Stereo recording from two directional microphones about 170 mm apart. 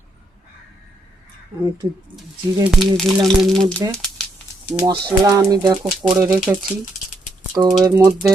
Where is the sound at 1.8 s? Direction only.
30° right (ahead or behind).